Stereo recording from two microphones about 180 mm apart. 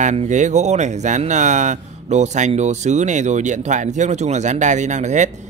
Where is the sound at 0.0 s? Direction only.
40° right (ahead or behind).